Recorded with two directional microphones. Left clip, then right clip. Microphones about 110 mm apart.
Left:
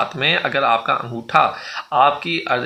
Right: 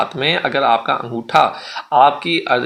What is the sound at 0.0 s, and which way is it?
Speech, 40° right (ahead or behind).